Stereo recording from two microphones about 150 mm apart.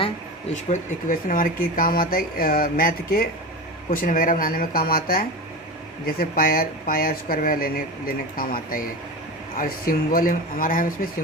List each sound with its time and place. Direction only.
0.5 s speech: 55° left (ahead or behind); by 3.2 s 75° left (ahead or behind)
3.8 s speech: 65° left (ahead or behind)